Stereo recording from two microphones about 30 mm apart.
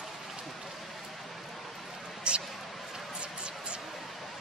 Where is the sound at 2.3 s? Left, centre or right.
Right.